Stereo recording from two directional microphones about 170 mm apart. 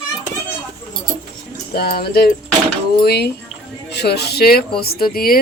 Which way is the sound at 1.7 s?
65° left (ahead or behind).